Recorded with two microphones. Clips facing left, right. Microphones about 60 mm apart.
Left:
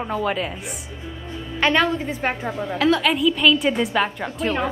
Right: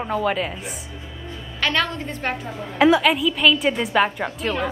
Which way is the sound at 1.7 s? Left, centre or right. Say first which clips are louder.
Left 4 dB; centre.